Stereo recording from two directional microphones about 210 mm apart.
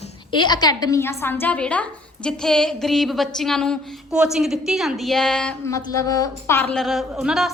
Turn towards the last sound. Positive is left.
turn(degrees=0)  # may be behind; listen again after turning